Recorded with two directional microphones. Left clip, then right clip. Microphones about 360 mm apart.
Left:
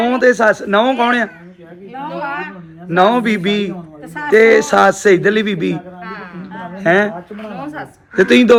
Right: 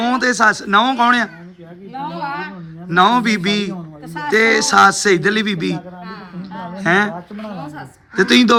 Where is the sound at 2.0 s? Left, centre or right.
Right.